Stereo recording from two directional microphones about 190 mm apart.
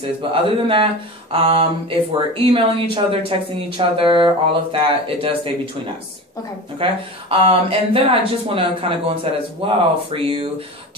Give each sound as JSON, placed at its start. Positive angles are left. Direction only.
{"t": 0.3, "sound": "speech", "side_deg": -30}
{"t": 6.8, "sound": "speech", "side_deg": -30}